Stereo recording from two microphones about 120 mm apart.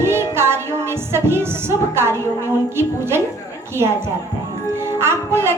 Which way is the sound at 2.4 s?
20° right (ahead or behind).